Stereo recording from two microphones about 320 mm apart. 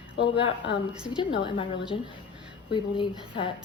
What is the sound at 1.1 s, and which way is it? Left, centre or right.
A woman's voice, centre.